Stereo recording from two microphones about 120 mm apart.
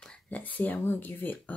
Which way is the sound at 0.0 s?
10° left (ahead or behind).